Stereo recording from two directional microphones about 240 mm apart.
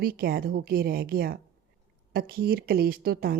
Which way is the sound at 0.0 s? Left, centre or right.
Right.